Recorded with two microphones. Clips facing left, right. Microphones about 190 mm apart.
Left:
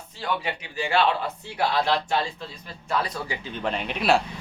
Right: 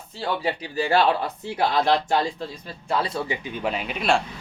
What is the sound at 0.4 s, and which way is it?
Speech, 40° right (ahead or behind).